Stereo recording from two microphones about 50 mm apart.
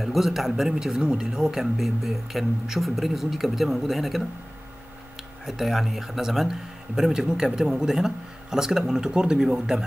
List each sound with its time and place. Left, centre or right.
0.0 s speech: centre
5.4 s a man's voice: centre